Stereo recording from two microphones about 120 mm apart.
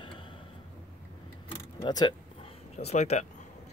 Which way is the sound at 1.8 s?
35° left (ahead or behind).